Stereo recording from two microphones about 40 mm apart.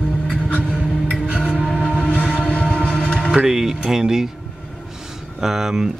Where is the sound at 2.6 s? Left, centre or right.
Right.